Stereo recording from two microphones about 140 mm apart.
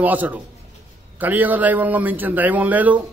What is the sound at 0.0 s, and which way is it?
A man's voice, 10° right (ahead or behind).